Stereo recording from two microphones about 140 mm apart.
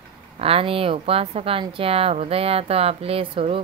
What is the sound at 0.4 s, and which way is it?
A woman's voice, 45° right (ahead or behind).